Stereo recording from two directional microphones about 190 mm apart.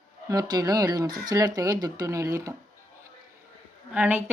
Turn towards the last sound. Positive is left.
turn(degrees=-10)  # may be behind; listen again after turning